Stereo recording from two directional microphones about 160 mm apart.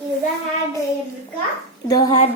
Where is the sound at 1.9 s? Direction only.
25° left (ahead or behind).